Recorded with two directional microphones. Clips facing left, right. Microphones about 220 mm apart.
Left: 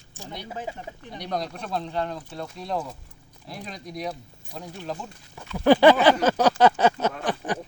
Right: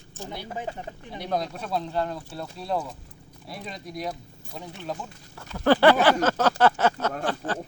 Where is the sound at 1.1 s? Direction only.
5° right (ahead or behind).